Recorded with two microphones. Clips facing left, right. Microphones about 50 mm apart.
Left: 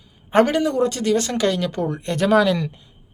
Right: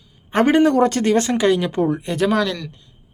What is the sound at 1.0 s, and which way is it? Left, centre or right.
Speech, right.